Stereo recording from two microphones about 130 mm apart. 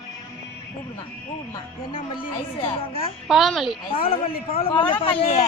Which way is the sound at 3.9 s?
45° left (ahead or behind).